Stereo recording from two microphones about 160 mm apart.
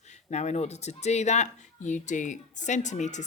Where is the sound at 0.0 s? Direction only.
45° left (ahead or behind).